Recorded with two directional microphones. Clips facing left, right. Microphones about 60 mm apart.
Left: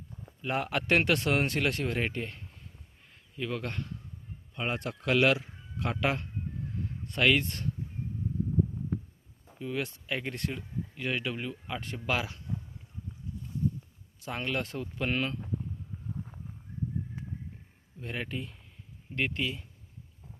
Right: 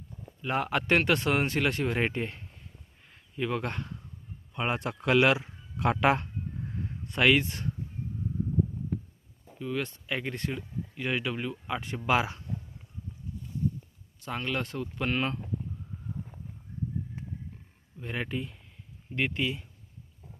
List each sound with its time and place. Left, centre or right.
0.4 s speech: centre
2.0 s speech: right
5.9 s speech: right
7.1 s speech: centre
9.6 s speech: centre; by 12.4 s right
14.3 s speech: centre
18.0 s speech: centre